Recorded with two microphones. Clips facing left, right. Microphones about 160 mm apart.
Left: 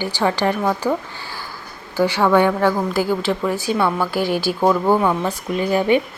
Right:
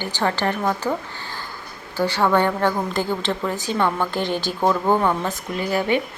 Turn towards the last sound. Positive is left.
turn(degrees=20)  # may be behind; listen again after turning